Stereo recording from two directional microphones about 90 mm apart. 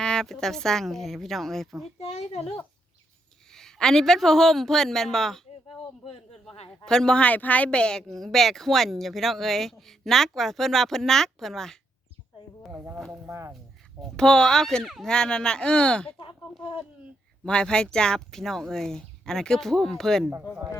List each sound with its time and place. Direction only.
0.0 s speech: 5° left (ahead or behind)
3.5 s speech: 5° left (ahead or behind)
6.8 s speech: 5° left (ahead or behind)
12.7 s speech: 30° right (ahead or behind)
14.0 s speech: 10° left (ahead or behind)
15.1 s speech: 10° left (ahead or behind)
17.4 s speech: 10° left (ahead or behind)